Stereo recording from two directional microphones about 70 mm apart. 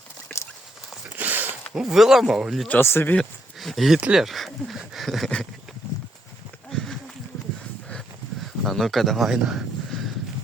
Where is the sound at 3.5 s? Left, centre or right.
Centre.